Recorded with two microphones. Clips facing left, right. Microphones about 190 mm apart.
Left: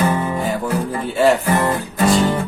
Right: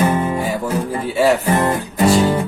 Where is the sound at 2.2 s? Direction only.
10° right (ahead or behind).